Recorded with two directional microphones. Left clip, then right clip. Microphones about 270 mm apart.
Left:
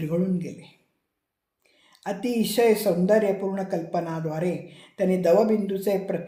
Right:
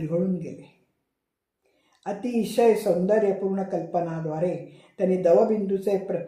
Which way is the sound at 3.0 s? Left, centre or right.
Left.